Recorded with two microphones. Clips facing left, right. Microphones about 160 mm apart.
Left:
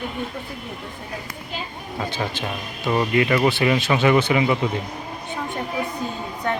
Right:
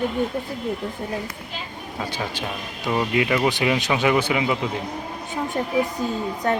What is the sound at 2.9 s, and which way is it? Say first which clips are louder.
A man's voice: left 2 dB; 5° right (ahead or behind).